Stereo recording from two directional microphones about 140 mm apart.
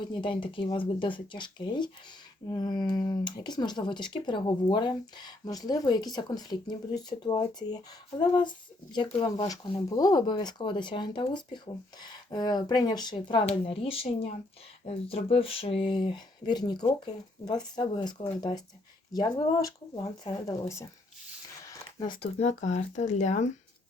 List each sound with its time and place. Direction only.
0.2 s speech: 35° left (ahead or behind)
21.6 s a sound: 25° left (ahead or behind)
22.0 s speech: 35° left (ahead or behind)
22.4 s speech: 55° left (ahead or behind)